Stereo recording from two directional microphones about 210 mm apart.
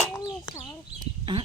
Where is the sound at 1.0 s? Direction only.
20° right (ahead or behind).